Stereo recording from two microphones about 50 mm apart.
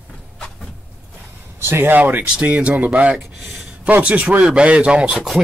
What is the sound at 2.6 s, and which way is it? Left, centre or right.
Speech, right.